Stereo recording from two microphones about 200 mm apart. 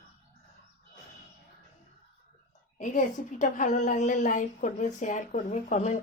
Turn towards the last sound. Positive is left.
turn(degrees=35)  # may be behind; listen again after turning